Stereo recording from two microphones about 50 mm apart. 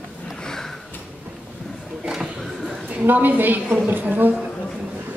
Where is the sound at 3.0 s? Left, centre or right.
Right.